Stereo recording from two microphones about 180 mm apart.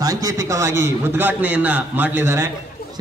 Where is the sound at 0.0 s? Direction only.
20° right (ahead or behind).